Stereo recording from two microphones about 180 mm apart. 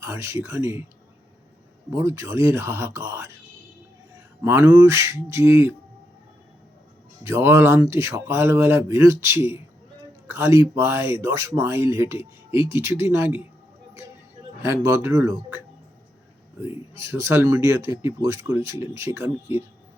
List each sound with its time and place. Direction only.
0.0 s speech: 15° right (ahead or behind)
1.9 s speech: 15° right (ahead or behind)
4.4 s speech: 10° right (ahead or behind)
7.3 s speech: 15° right (ahead or behind)
14.6 s speech: 15° right (ahead or behind)
16.6 s speech: 15° right (ahead or behind)